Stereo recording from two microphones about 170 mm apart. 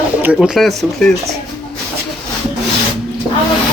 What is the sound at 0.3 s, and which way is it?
Speech, centre (ahead or behind).